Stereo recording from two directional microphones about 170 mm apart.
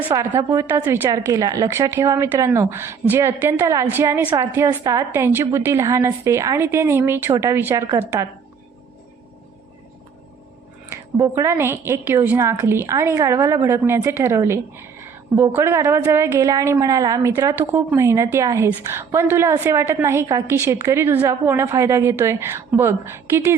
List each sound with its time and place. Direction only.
0.1 s a woman's voice: 15° right (ahead or behind)
11.2 s a woman's voice: 15° right (ahead or behind)